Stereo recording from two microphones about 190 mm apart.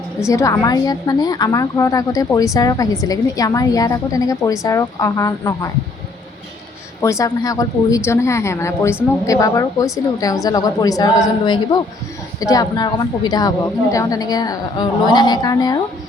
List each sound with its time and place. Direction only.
0.2 s a woman's voice: 15° left (ahead or behind)
7.0 s a woman's voice: 15° left (ahead or behind)